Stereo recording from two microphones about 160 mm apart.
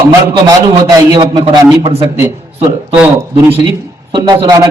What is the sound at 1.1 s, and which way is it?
Speech, 25° right (ahead or behind).